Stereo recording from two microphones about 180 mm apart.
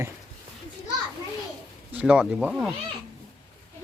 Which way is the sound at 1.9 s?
5° right (ahead or behind).